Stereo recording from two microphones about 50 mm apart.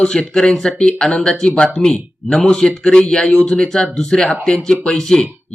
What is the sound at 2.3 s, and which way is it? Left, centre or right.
A man's voice, centre.